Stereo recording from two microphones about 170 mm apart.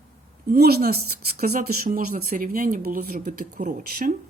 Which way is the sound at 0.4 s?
65° right (ahead or behind).